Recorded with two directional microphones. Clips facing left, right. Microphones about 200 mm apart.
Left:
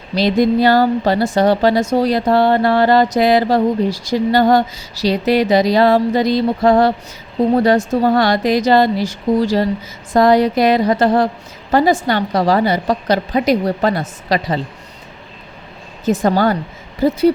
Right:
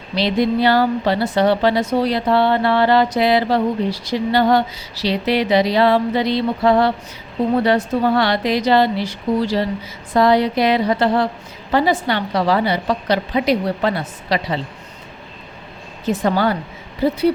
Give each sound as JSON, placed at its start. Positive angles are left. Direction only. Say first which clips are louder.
{"t": 0.2, "sound": "a woman's voice", "louder": "left 4 dB", "side_deg": 45}
{"t": 16.0, "sound": "a woman's voice", "louder": "left 3 dB", "side_deg": 45}